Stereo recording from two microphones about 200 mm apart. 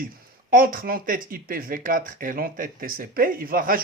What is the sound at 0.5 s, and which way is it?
A man's voice, 45° right (ahead or behind).